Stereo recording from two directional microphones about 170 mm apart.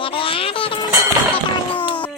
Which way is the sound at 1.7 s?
30° left (ahead or behind).